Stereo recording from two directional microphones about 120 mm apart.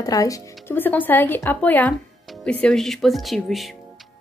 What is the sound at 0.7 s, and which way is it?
Speech, 15° left (ahead or behind).